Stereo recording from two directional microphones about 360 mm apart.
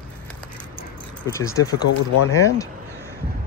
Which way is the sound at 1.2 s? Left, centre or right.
Centre.